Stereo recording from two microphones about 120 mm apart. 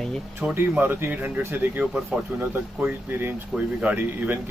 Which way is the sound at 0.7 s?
15° right (ahead or behind).